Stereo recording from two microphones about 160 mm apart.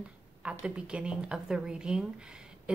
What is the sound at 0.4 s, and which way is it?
A woman's voice, 5° right (ahead or behind).